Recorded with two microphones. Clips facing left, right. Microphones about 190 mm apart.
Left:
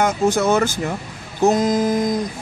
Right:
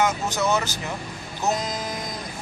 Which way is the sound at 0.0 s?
50° left (ahead or behind).